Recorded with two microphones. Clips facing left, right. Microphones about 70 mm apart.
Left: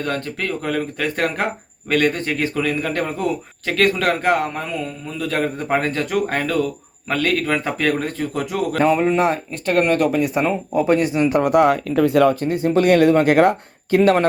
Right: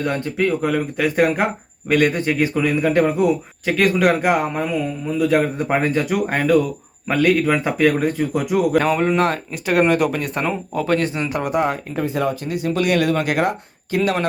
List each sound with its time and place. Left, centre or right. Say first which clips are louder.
0.0 s a man's voice: right 4 dB; centre
8.8 s speech: left 1 dB; centre
9.9 s a man's voice: left 1 dB; centre
10.2 s speech: left 4 dB; centre
11.4 s speech: left 5 dB; left
12.4 s speech: left 4 dB; left